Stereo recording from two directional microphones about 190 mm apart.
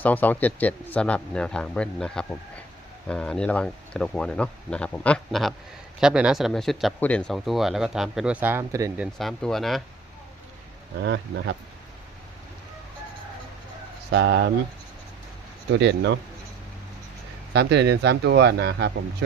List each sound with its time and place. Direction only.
0.0 s speech: 10° left (ahead or behind); by 9.0 s 15° right (ahead or behind)
9.1 s speech: centre (ahead or behind)
11.0 s speech: 65° right (ahead or behind)
14.1 s speech: 65° right (ahead or behind)
15.7 s speech: 65° right (ahead or behind)
17.5 s speech: 60° right (ahead or behind)